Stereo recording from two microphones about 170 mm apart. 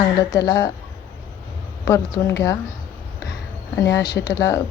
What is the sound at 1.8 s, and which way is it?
Speech, 20° left (ahead or behind).